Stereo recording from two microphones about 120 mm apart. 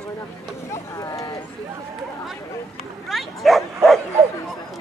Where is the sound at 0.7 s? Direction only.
30° left (ahead or behind).